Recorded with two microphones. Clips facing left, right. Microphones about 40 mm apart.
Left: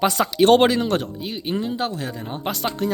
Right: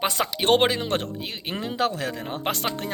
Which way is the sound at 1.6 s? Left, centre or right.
Right.